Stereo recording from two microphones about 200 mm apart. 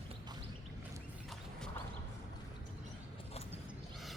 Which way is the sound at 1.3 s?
5° left (ahead or behind).